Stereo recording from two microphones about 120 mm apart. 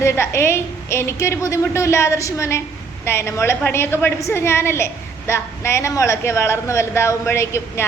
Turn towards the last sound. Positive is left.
turn(degrees=20)  # may be behind; listen again after turning